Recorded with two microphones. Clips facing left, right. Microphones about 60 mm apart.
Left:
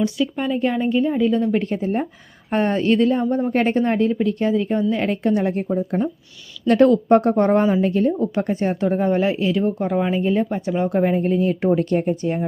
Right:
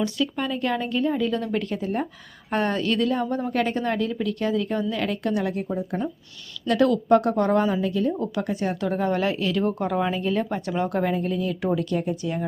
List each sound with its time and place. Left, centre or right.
0.0 s speech: centre
1.5 s speech: left
11.2 s speech: left